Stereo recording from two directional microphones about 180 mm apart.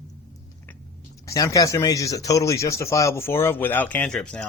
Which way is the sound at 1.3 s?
20° left (ahead or behind).